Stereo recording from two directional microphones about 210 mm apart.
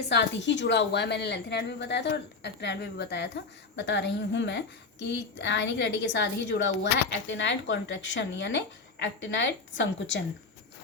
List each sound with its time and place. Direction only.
0.1 s a woman's voice: 55° left (ahead or behind)